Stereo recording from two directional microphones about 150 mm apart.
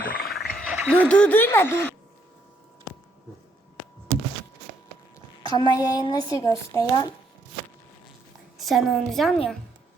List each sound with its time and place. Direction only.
0.0 s frog: 70° left (ahead or behind)
0.3 s frog: centre (ahead or behind)
0.7 s a sound: 10° right (ahead or behind)
1.0 s speech: 5° left (ahead or behind)
5.5 s speech: 30° left (ahead or behind)
8.5 s a woman's voice: centre (ahead or behind)